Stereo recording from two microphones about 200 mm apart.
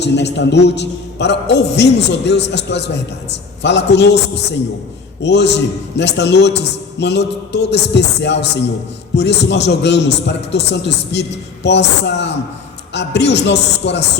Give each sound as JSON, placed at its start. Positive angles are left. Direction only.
{"t": 0.0, "sound": "a man's voice", "side_deg": 60}